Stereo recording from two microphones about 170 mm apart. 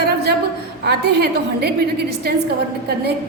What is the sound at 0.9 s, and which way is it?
A woman's voice, 75° right (ahead or behind).